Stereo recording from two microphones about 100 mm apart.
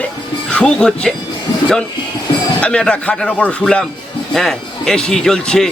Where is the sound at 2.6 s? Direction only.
10° left (ahead or behind).